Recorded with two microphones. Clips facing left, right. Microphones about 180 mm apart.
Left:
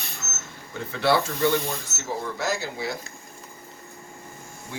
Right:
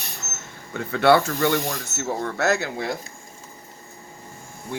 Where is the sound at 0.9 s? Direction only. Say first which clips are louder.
Right 5 dB; 55° right (ahead or behind); by 1.8 s 85° right.